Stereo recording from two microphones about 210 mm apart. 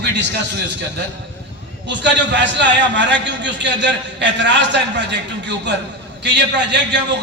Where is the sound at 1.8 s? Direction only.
55° right (ahead or behind).